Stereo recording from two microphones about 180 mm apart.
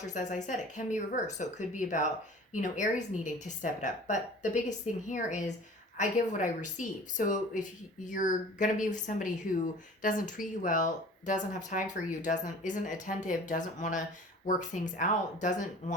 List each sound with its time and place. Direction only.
0.0 s speech: 45° left (ahead or behind)